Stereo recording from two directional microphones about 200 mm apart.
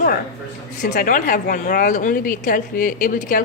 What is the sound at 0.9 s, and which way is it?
A woman's voice, 45° left (ahead or behind).